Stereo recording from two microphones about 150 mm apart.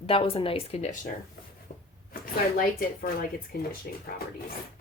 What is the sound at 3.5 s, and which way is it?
Speech, 90° left.